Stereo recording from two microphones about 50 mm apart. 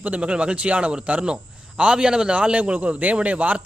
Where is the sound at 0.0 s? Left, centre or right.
Right.